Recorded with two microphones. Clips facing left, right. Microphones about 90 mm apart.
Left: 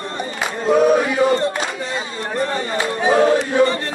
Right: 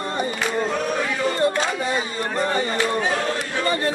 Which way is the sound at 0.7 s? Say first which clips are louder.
Left 9 dB; 15° left (ahead or behind).